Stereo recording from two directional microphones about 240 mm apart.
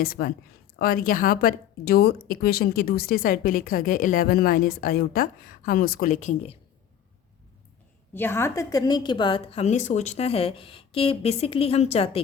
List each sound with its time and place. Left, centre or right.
0.0 s speech: left
8.1 s a woman's voice: centre; by 12.2 s left